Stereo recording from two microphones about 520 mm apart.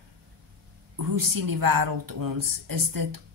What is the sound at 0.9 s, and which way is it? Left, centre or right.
Speech, right.